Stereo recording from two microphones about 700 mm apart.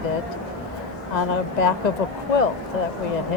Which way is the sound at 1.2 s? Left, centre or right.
Left.